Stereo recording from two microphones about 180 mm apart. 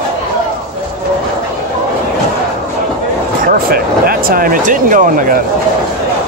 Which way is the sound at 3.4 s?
55° right (ahead or behind).